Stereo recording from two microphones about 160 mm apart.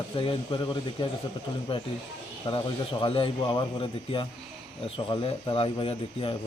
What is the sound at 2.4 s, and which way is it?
Speech, 30° left (ahead or behind).